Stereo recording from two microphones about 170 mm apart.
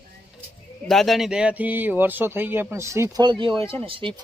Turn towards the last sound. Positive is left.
turn(degrees=-30)  # may be behind; listen again after turning